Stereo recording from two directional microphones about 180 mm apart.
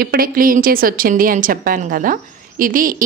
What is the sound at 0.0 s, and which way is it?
A woman's voice, 55° right (ahead or behind).